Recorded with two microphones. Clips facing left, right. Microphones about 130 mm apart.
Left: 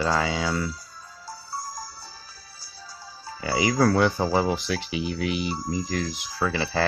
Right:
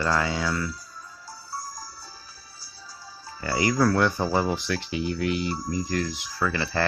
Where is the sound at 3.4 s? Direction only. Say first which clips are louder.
Left 1 dB; 15° left (ahead or behind).